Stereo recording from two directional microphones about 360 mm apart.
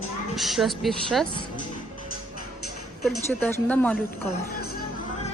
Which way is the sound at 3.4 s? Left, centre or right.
Centre.